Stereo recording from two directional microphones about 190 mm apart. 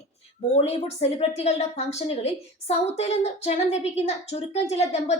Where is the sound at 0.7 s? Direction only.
35° left (ahead or behind).